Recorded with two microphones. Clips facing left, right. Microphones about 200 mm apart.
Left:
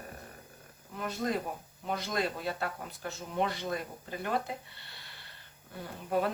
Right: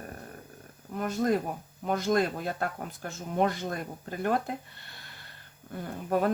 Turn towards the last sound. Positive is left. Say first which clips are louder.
# right 4 dB
turn(degrees=-45)  # may be behind; listen again after turning